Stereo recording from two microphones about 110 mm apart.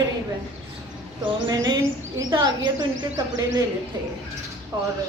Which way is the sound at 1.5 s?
40° right (ahead or behind).